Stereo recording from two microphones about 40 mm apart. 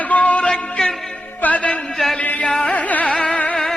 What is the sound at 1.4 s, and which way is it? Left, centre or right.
Music, left.